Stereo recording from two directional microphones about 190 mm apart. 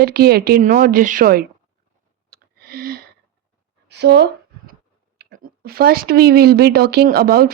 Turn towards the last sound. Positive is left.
turn(degrees=-55)  # may be behind; listen again after turning